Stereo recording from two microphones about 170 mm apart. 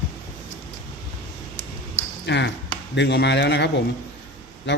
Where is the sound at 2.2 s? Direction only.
90° left.